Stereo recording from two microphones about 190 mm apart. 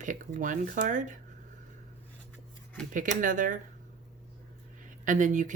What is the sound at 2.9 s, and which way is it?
Speech, 45° right (ahead or behind).